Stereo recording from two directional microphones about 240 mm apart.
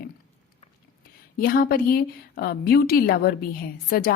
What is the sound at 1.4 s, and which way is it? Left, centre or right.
Speech, left.